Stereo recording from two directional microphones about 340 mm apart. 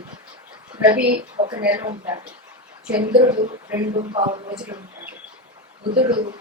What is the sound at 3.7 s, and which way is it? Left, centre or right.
A woman's voice, centre.